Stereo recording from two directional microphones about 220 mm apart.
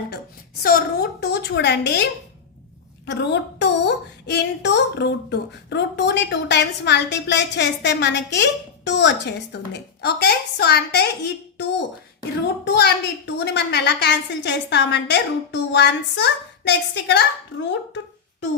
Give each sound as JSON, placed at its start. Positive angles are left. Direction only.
{"t": 0.6, "sound": "a woman's voice", "side_deg": 40}
{"t": 3.1, "sound": "a woman's voice", "side_deg": 50}
{"t": 12.6, "sound": "a woman's voice", "side_deg": 50}